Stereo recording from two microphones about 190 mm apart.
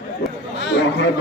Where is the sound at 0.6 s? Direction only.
65° left (ahead or behind).